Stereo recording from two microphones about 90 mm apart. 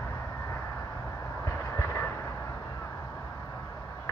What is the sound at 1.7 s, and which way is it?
Vehicle, 30° left (ahead or behind).